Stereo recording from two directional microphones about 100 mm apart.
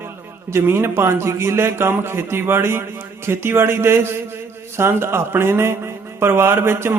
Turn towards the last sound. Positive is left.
turn(degrees=-25)  # may be behind; listen again after turning